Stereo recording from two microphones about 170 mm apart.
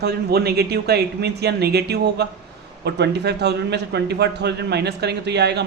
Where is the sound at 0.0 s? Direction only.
70° right (ahead or behind).